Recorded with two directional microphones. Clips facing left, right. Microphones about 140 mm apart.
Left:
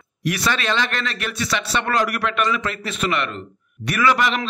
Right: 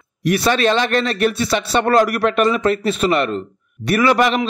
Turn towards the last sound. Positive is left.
turn(degrees=-45)  # may be behind; listen again after turning